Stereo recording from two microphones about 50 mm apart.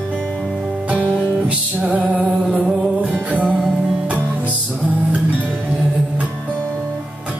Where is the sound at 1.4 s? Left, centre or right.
Right.